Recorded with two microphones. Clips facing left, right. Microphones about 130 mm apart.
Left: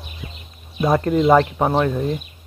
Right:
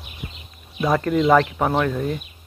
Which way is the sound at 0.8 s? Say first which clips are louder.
Left 2 dB; 25° left (ahead or behind).